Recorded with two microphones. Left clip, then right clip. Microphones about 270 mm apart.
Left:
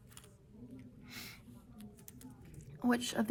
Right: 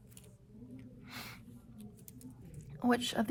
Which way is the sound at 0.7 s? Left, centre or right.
Centre.